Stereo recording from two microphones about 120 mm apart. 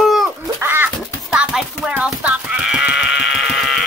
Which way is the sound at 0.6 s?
20° right (ahead or behind).